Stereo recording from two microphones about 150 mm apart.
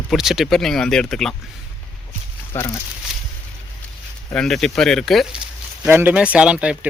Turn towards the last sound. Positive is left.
turn(degrees=-5)  # may be behind; listen again after turning